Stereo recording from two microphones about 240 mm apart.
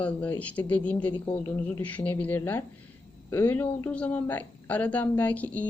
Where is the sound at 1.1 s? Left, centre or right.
Centre.